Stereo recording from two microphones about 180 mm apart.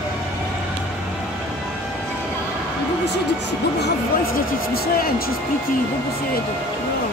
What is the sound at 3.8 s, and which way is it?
Music, 55° left (ahead or behind).